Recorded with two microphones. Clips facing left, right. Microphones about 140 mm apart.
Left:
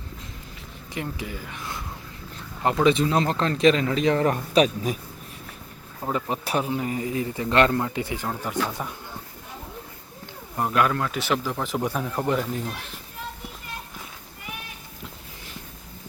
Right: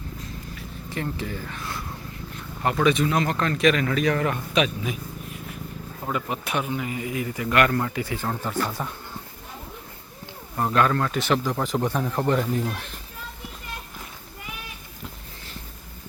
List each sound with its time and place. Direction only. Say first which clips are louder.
0.9 s speech: right 2 dB; 15° left (ahead or behind)
2.8 s a man's voice: left 1 dB; 30° left (ahead or behind)
6.1 s speech: left 2 dB; 30° left (ahead or behind); by 8.9 s 10° left (ahead or behind)
10.6 s speech: right 1 dB; 10° left (ahead or behind)